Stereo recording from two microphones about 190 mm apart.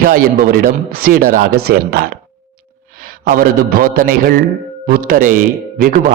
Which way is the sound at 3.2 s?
50° right (ahead or behind).